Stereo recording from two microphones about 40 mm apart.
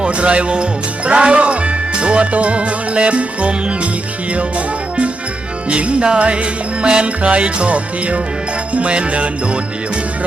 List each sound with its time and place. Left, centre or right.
0.0 s speech: right
5.6 s speech: right